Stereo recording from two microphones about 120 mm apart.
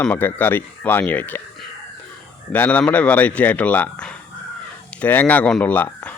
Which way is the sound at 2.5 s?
15° left (ahead or behind).